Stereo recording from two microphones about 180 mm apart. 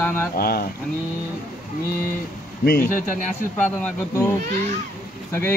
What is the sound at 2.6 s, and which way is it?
Speech, 50° left (ahead or behind).